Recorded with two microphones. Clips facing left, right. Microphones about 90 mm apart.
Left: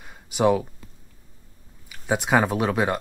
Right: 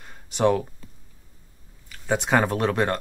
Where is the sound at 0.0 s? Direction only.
5° left (ahead or behind).